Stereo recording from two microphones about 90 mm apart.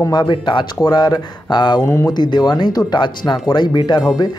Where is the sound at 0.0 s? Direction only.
50° left (ahead or behind).